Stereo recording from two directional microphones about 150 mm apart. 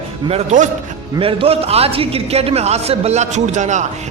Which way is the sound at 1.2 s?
35° right (ahead or behind).